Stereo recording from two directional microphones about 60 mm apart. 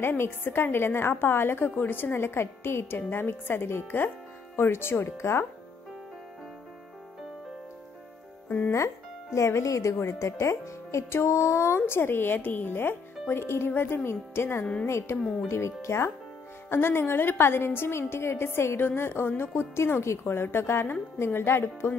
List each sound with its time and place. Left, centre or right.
0.0 s a woman's voice: left
8.5 s speech: left
8.7 s a woman's voice: left
16.6 s a woman's voice: left